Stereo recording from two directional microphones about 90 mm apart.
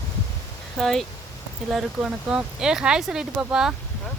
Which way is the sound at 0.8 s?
5° left (ahead or behind).